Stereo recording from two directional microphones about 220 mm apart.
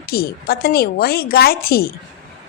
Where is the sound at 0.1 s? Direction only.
45° left (ahead or behind).